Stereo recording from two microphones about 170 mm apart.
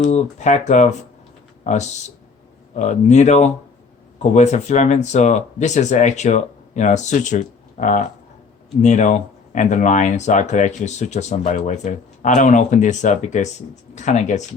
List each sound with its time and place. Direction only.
0.0 s speech: 45° left (ahead or behind)